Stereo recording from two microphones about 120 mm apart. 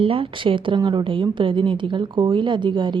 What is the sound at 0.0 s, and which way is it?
Speech, 50° right (ahead or behind).